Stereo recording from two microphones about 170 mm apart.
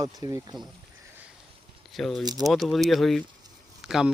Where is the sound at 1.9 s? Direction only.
Centre (ahead or behind).